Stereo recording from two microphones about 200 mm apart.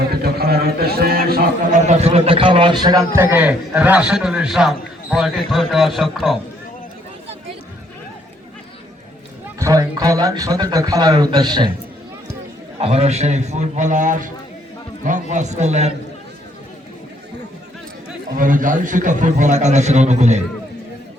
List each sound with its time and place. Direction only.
0.1 s a man's voice: 50° right (ahead or behind)
1.8 s a man's voice: 35° right (ahead or behind); by 6.4 s centre (ahead or behind)
9.6 s a man's voice: 15° right (ahead or behind)
12.8 s a man's voice: 30° right (ahead or behind)
18.3 s a man's voice: 40° right (ahead or behind)